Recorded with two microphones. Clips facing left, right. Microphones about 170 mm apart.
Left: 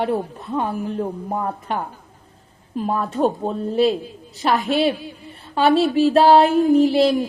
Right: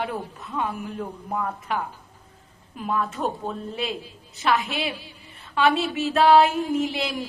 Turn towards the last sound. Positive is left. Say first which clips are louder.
# left 11 dB
turn(degrees=35)  # may be behind; listen again after turning